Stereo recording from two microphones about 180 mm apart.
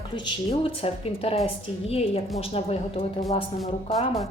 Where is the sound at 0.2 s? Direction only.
30° left (ahead or behind).